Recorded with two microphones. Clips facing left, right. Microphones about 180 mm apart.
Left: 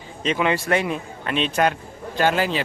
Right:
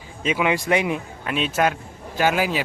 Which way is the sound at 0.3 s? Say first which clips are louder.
Even; 10° right (ahead or behind).